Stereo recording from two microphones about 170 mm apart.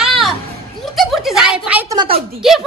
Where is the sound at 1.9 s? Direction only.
25° right (ahead or behind).